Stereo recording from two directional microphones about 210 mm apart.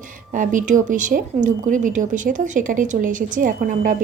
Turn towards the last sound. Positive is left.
turn(degrees=-40)  # may be behind; listen again after turning